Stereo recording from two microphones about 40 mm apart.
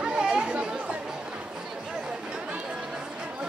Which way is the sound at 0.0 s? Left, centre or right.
Right.